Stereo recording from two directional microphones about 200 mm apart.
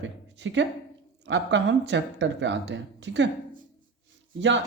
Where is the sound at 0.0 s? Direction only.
65° right (ahead or behind).